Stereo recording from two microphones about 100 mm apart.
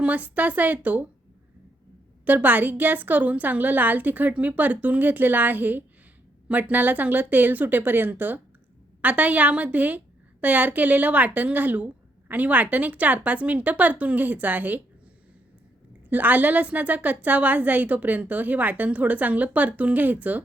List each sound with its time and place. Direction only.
0.0 s a woman's voice: 15° right (ahead or behind)
2.2 s a woman's voice: 15° right (ahead or behind)
16.0 s a woman's voice: 15° right (ahead or behind)